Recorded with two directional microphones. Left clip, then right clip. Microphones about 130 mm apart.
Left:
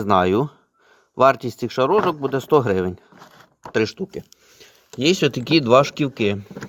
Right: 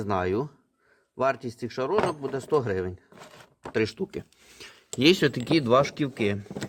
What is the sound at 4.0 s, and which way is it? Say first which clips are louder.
Speech: left 3 dB; centre (ahead or behind).